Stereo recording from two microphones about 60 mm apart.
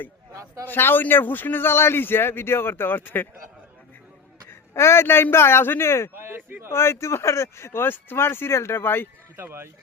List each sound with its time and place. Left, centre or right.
0.6 s a man's voice: left
4.7 s speech: left
6.1 s speech: right
6.7 s speech: left
9.3 s speech: right